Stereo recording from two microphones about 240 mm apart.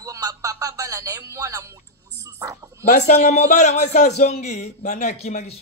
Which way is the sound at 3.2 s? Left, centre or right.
Left.